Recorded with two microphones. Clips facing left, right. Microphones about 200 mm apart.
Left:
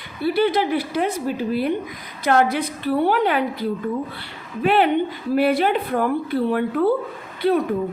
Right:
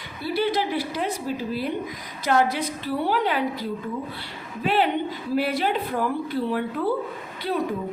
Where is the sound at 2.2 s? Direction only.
60° left (ahead or behind).